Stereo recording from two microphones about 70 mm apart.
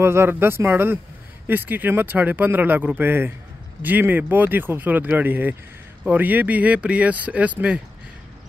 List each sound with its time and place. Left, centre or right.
0.0 s speech: right; by 7.8 s centre